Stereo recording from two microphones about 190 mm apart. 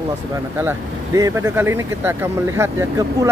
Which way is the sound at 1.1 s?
15° right (ahead or behind).